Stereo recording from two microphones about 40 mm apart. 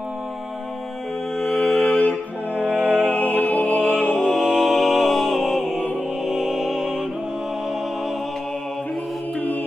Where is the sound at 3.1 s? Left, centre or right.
Left.